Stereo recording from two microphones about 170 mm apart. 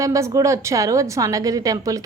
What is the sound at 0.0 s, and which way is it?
A woman's voice, 20° right (ahead or behind).